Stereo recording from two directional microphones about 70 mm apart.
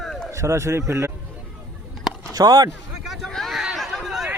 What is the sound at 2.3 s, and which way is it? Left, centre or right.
Speech, right.